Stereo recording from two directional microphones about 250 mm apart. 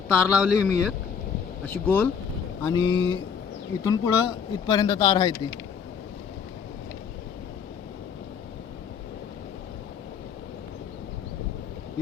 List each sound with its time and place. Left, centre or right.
0.1 s a man's voice: centre